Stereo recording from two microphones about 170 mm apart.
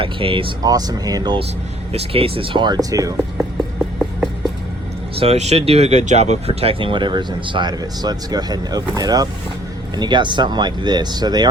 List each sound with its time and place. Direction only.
0.0 s speech: 30° right (ahead or behind)
5.2 s speech: 40° right (ahead or behind)